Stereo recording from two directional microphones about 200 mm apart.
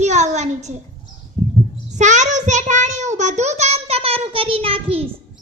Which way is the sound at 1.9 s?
35° right (ahead or behind).